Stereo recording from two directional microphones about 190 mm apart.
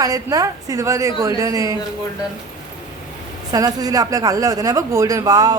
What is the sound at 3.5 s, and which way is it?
Speech, 20° right (ahead or behind).